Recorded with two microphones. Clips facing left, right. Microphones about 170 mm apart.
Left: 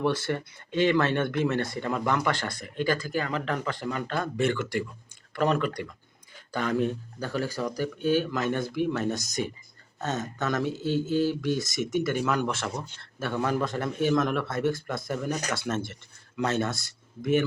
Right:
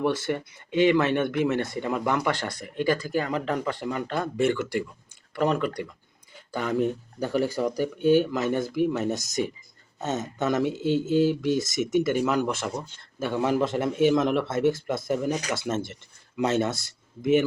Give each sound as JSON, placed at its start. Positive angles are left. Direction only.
{"t": 0.0, "sound": "speech", "side_deg": -10}
{"t": 9.1, "sound": "speech", "side_deg": -25}
{"t": 10.5, "sound": "speech", "side_deg": -10}
{"t": 11.2, "sound": "speech", "side_deg": -20}